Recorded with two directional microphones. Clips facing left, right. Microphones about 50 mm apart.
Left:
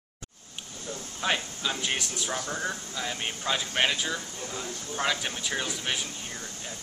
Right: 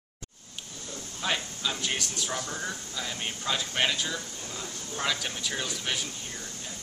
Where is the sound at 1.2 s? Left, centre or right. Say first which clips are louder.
Left 2 dB; centre.